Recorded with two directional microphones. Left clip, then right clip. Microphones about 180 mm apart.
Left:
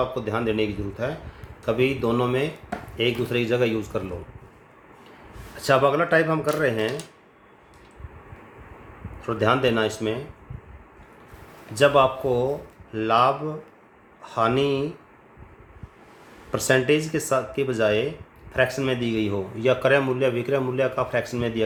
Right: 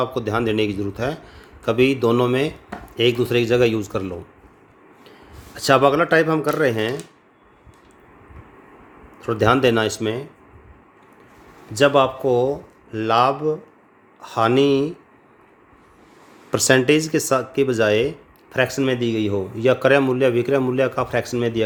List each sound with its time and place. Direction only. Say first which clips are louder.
0.0 s speech: right 3 dB; 55° right (ahead or behind)
5.5 s speech: right 4 dB; 55° right (ahead or behind)
9.2 s a man's voice: right 4 dB; 50° right (ahead or behind)
11.7 s a man's voice: right 2 dB; 50° right (ahead or behind)
16.5 s a man's voice: right 4 dB; 60° right (ahead or behind)